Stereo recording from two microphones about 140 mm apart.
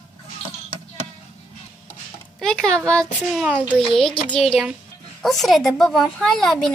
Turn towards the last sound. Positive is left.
turn(degrees=0)  # may be behind; listen again after turning